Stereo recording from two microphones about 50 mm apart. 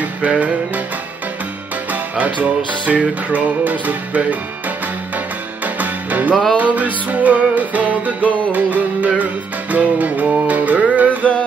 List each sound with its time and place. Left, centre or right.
0.0 s music: right
1.9 s music: right